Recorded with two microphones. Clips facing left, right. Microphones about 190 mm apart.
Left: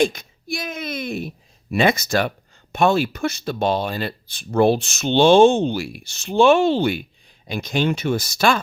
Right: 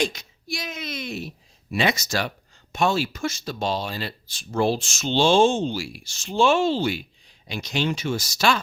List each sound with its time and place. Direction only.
0.0 s speech: 55° left (ahead or behind)